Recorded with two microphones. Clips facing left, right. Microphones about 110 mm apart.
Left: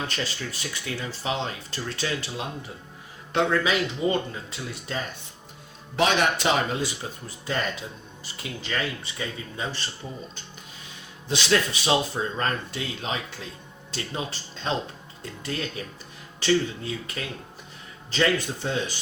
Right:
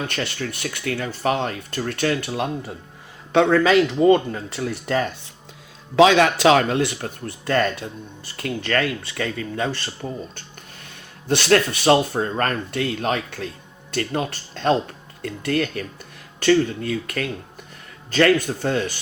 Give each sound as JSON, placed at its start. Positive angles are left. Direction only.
{"t": 0.1, "sound": "speech", "side_deg": -60}
{"t": 3.3, "sound": "speech", "side_deg": -70}
{"t": 4.1, "sound": "speech", "side_deg": -50}
{"t": 6.0, "sound": "speech", "side_deg": -90}